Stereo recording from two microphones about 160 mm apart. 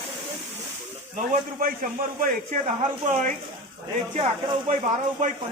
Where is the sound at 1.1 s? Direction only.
55° right (ahead or behind).